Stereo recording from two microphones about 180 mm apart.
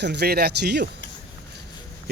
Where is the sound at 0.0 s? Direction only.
70° right (ahead or behind).